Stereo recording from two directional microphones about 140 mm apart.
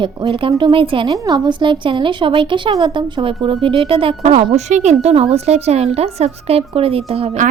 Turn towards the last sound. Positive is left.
turn(degrees=-45)  # may be behind; listen again after turning